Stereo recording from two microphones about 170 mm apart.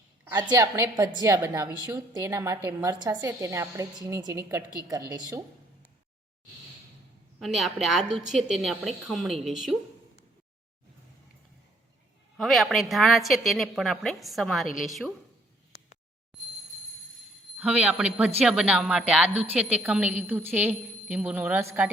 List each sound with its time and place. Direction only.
0.3 s a woman's voice: 20° right (ahead or behind)
7.3 s a woman's voice: centre (ahead or behind)
12.4 s a woman's voice: centre (ahead or behind)
17.6 s a woman's voice: 5° right (ahead or behind)